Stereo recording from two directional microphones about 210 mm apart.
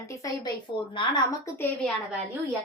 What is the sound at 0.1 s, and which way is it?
A woman's voice, 15° left (ahead or behind).